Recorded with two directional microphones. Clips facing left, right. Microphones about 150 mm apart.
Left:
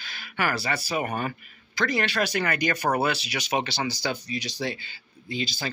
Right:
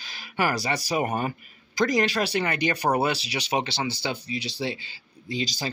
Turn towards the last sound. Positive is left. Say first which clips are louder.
# right 1 dB
turn(degrees=-35)  # may be behind; listen again after turning